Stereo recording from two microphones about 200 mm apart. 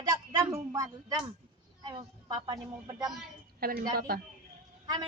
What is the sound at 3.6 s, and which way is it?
Speech, 50° right (ahead or behind).